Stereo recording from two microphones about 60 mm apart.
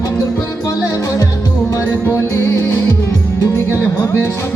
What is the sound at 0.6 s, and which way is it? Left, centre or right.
Music, left.